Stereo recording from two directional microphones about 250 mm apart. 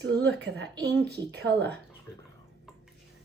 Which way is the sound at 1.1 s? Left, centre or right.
Right.